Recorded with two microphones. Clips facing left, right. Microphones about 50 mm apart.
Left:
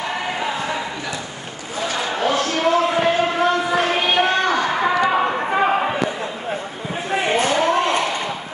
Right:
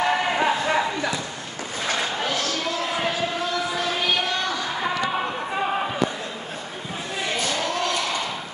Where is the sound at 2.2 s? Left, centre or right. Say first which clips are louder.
Left 7 dB; left.